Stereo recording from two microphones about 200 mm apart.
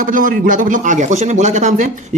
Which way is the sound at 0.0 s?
40° right (ahead or behind).